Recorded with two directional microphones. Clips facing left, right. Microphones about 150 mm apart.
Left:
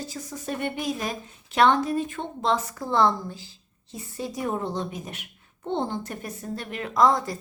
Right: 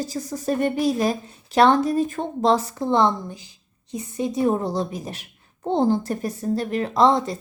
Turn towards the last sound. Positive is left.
turn(degrees=-25)  # may be behind; listen again after turning